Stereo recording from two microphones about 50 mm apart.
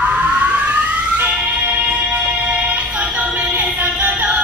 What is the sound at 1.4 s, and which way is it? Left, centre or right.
Music, right.